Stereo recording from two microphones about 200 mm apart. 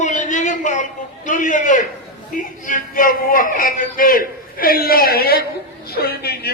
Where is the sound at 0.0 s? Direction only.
40° left (ahead or behind).